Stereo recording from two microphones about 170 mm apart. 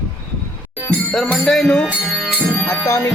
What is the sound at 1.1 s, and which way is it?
Music, centre (ahead or behind).